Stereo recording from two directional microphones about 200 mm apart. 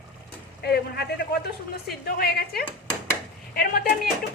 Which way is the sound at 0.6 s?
55° left (ahead or behind).